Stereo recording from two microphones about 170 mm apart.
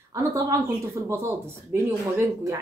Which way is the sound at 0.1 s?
20° right (ahead or behind).